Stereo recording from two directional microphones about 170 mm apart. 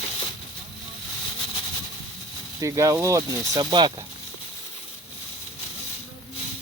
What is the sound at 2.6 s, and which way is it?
Speech, 20° right (ahead or behind).